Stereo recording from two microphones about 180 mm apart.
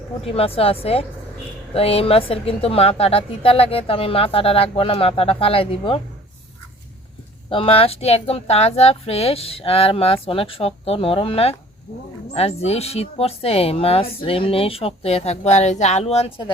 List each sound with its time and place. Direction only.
0.3 s a woman's voice: 30° left (ahead or behind)
7.5 s a woman's voice: 30° left (ahead or behind)